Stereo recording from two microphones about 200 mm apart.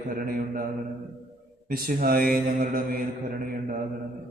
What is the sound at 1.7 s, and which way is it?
Mantra, 45° right (ahead or behind).